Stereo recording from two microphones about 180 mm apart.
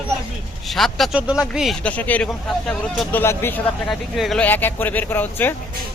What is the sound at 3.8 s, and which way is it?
Speech, centre (ahead or behind).